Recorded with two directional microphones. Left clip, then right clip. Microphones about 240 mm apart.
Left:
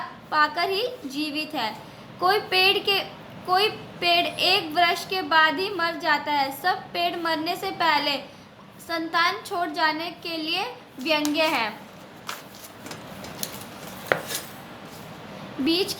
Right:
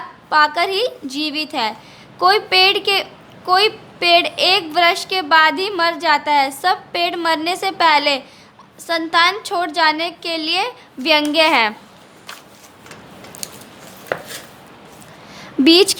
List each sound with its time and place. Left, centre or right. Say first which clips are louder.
0.3 s a woman's voice: right 8 dB; right
15.6 s a woman's voice: right 13 dB; right